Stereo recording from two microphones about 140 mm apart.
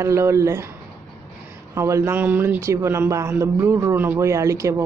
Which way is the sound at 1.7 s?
20° right (ahead or behind).